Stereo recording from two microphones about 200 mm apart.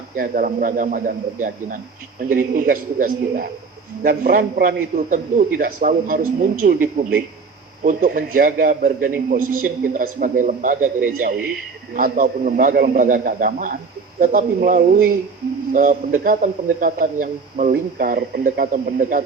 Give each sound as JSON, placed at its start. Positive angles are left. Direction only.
{"t": 0.2, "sound": "a man's voice", "side_deg": -45}
{"t": 11.9, "sound": "a man's voice", "side_deg": -45}